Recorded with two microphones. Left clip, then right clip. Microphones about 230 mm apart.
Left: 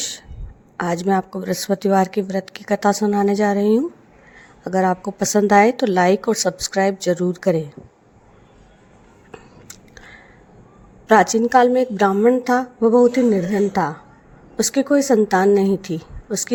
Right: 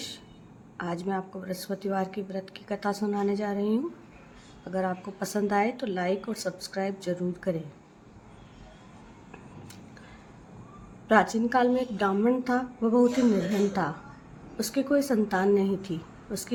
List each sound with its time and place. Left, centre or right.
0.8 s a woman's voice: left
9.3 s a sound: left
11.1 s a woman's voice: left
14.5 s a woman's voice: left